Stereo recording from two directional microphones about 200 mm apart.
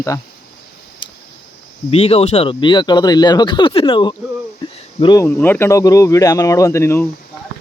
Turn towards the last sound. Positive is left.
turn(degrees=15)  # may be behind; listen again after turning